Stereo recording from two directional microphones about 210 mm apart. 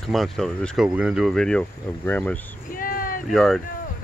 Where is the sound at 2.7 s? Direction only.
40° left (ahead or behind).